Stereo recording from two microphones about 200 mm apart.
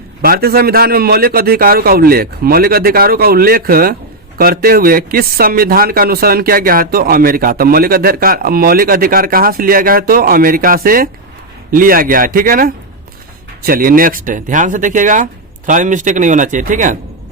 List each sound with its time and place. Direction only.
0.2 s speech: 50° right (ahead or behind)